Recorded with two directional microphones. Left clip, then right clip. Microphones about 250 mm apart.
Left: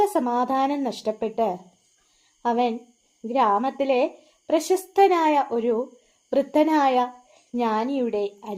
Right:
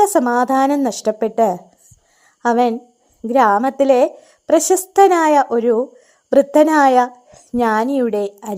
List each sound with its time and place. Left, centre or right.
0.0 s a woman's voice: right